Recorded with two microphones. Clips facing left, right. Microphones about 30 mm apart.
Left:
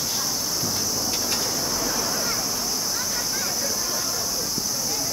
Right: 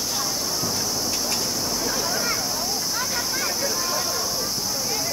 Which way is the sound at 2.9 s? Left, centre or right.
Right.